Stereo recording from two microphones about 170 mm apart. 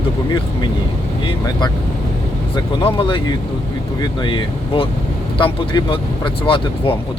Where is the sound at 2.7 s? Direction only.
30° left (ahead or behind).